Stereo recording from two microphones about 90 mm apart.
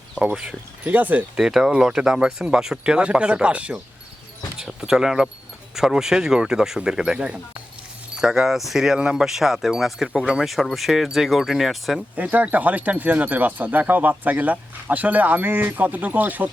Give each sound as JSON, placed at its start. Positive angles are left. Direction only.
{"t": 0.2, "sound": "speech", "side_deg": -10}
{"t": 1.4, "sound": "speech", "side_deg": -5}
{"t": 12.1, "sound": "speech", "side_deg": -20}